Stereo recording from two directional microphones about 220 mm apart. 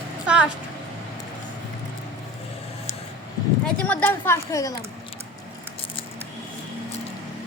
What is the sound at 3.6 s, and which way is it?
A woman's voice, 5° left (ahead or behind).